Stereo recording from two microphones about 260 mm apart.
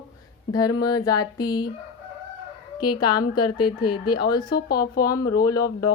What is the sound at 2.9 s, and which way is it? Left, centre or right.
Speech, left.